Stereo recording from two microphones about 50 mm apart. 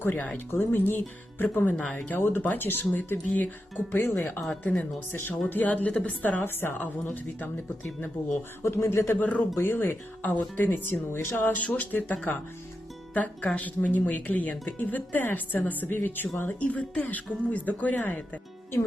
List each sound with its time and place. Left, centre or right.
0.3 s speech: left
1.7 s speech: centre
2.1 s speech: left
3.9 s speech: left
4.6 s speech: left
6.4 s speech: left
8.6 s speech: left
9.1 s speech: left
9.6 s speech: left
10.2 s speech: left
11.4 s speech: left
13.1 s speech: left
16.5 s speech: left